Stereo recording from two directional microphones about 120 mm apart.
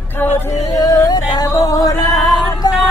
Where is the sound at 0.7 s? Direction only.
30° left (ahead or behind).